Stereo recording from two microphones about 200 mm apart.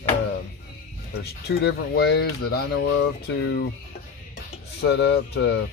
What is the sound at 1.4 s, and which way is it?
Speech, 55° left (ahead or behind).